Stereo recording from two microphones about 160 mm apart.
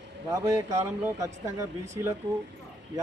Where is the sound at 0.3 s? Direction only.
20° right (ahead or behind).